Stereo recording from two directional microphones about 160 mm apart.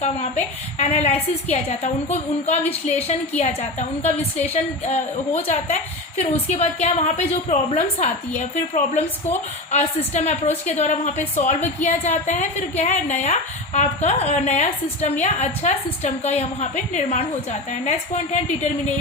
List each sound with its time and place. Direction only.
0.0 s a woman's voice: 45° left (ahead or behind)